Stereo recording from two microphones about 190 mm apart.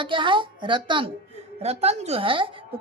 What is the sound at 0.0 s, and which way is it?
A woman's voice, 25° right (ahead or behind).